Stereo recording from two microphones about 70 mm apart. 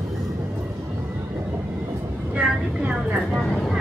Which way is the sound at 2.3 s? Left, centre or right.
Centre.